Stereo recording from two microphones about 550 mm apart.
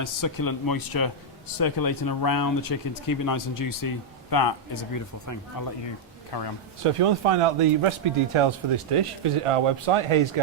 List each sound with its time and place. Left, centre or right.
0.0 s speech: left
6.3 s a man's voice: left
6.8 s a man's voice: right